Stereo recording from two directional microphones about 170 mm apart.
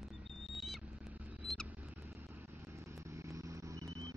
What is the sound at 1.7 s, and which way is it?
Vehicle, 10° right (ahead or behind).